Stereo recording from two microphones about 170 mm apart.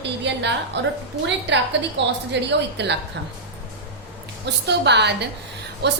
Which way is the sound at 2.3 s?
90° right.